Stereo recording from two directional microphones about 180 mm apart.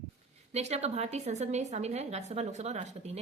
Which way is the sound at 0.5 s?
35° right (ahead or behind).